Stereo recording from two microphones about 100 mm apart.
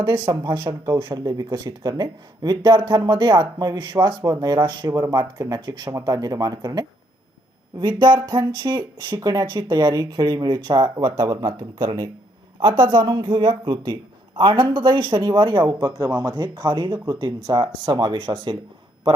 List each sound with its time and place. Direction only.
0.4 s speech: 50° right (ahead or behind)
1.2 s speech: 40° right (ahead or behind)
4.9 s speech: 35° right (ahead or behind); by 15.7 s 50° right (ahead or behind)
15.8 s speech: 40° right (ahead or behind)